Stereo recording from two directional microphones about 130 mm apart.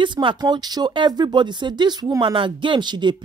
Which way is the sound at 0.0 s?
40° right (ahead or behind).